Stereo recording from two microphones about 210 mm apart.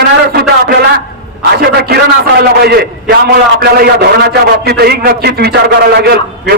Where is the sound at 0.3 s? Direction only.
45° right (ahead or behind).